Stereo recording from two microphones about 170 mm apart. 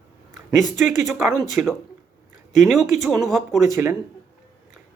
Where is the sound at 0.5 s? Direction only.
45° left (ahead or behind).